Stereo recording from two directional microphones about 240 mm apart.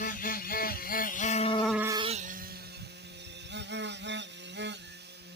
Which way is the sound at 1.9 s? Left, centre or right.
Right.